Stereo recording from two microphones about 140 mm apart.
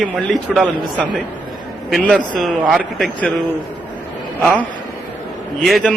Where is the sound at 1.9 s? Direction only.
Centre (ahead or behind).